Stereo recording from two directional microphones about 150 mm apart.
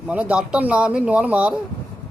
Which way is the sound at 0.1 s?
5° right (ahead or behind).